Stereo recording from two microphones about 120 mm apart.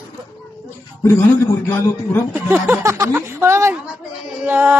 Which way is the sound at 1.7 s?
15° left (ahead or behind).